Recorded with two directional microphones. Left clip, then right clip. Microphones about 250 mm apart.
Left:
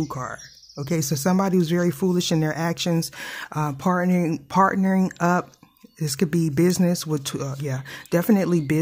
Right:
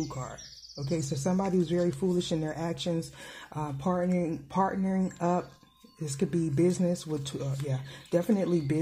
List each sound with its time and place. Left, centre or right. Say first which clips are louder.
0.3 s speech: left 8 dB; left